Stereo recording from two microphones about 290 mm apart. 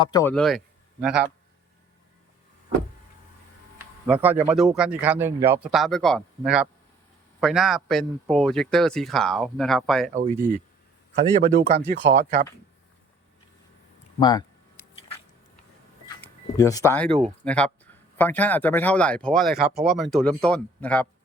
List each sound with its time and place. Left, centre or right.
0.0 s a man's voice: centre
4.0 s a man's voice: centre
11.1 s a man's voice: right
14.2 s speech: centre
16.2 s a man's voice: centre